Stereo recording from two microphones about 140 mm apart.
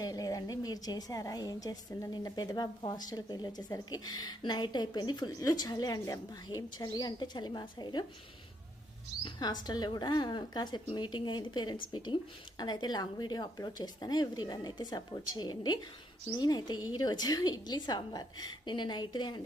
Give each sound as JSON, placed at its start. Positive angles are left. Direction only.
{"t": 0.0, "sound": "a woman's voice", "side_deg": 25}
{"t": 9.2, "sound": "a woman's voice", "side_deg": 30}